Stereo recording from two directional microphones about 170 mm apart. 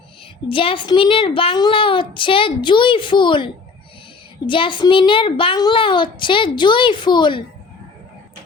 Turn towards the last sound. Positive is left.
turn(degrees=25)  # may be behind; listen again after turning